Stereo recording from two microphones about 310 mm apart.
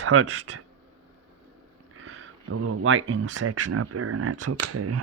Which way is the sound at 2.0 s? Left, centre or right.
Right.